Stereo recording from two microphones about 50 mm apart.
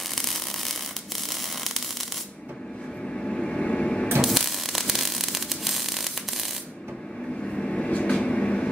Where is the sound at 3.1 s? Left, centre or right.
Centre.